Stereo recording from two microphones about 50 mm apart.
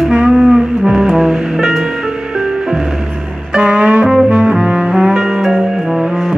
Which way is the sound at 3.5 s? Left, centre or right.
Centre.